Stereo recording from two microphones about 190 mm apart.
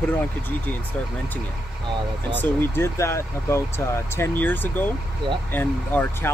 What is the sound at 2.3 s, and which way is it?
Speech, 10° left (ahead or behind).